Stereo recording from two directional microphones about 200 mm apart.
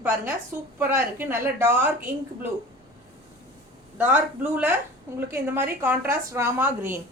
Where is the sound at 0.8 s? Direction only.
10° right (ahead or behind).